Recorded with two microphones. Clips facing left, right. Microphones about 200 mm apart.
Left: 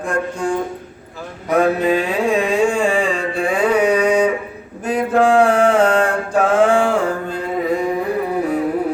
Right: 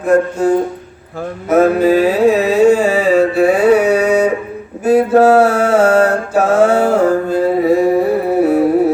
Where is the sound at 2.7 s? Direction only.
5° right (ahead or behind).